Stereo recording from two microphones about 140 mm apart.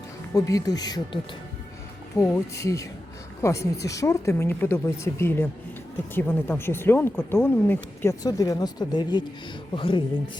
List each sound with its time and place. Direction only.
0.3 s speech: 25° left (ahead or behind)
8.2 s speech: 25° left (ahead or behind)